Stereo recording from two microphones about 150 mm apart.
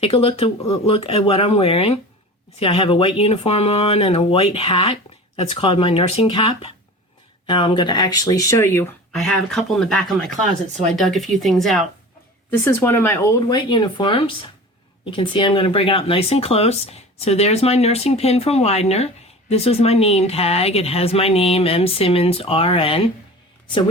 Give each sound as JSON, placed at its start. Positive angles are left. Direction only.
{"t": 0.0, "sound": "speech", "side_deg": 40}
{"t": 9.1, "sound": "speech", "side_deg": 0}
{"t": 12.5, "sound": "speech", "side_deg": 15}
{"t": 13.5, "sound": "speech", "side_deg": 30}